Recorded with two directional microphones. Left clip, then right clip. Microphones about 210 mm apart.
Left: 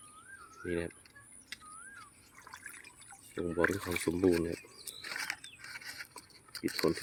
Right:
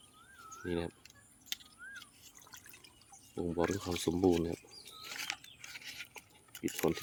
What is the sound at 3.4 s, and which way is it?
Speech, 10° right (ahead or behind).